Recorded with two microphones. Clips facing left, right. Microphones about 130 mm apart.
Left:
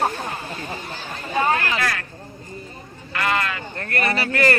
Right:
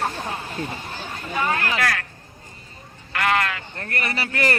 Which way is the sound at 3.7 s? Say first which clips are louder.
Left 7 dB; 15° right (ahead or behind).